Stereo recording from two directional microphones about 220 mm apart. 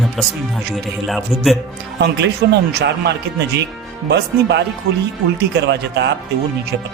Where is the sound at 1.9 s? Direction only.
50° right (ahead or behind).